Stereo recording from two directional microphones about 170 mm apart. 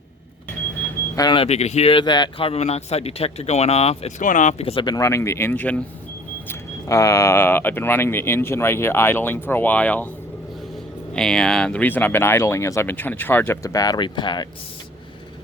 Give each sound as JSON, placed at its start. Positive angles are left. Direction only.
{"t": 1.1, "sound": "speech", "side_deg": 25}
{"t": 11.1, "sound": "speech", "side_deg": 5}